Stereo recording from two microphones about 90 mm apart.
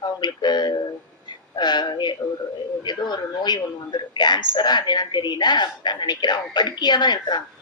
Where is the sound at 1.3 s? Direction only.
55° left (ahead or behind).